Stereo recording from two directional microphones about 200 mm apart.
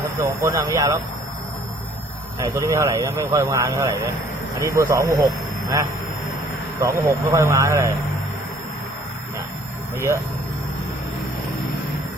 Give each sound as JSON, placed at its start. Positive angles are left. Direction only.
{"t": 0.2, "sound": "speech", "side_deg": -15}
{"t": 2.4, "sound": "speech", "side_deg": -15}
{"t": 6.7, "sound": "speech", "side_deg": -15}